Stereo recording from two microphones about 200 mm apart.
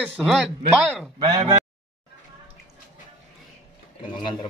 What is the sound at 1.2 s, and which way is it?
Speech, 25° right (ahead or behind).